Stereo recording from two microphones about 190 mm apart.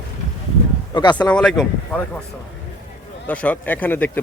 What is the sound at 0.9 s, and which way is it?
Speech, 25° left (ahead or behind).